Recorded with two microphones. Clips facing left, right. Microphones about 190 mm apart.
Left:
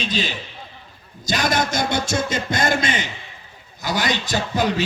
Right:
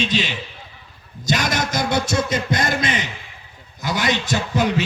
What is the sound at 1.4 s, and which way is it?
Speech, 55° left (ahead or behind).